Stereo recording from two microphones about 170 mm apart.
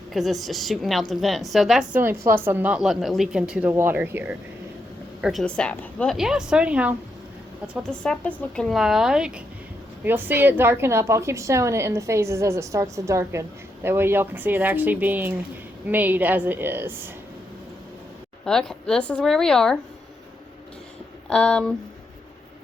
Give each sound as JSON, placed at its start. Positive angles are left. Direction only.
{"t": 0.1, "sound": "a woman's voice", "side_deg": 0}
{"t": 5.2, "sound": "a woman's voice", "side_deg": 0}
{"t": 7.9, "sound": "a woman's voice", "side_deg": 5}
{"t": 18.4, "sound": "a woman's voice", "side_deg": 5}
{"t": 21.2, "sound": "speech", "side_deg": 5}